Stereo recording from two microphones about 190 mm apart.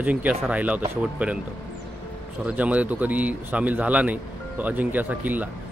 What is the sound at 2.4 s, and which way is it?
A man's voice, 5° right (ahead or behind).